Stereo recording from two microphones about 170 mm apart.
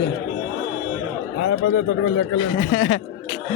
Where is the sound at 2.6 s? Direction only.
40° left (ahead or behind).